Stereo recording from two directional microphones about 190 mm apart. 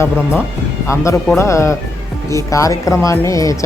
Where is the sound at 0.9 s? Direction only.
15° left (ahead or behind).